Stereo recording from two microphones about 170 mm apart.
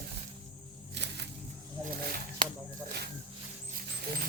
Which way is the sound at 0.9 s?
90° right.